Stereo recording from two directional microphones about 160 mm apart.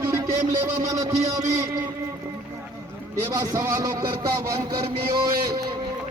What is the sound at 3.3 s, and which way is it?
A man's voice, 20° right (ahead or behind).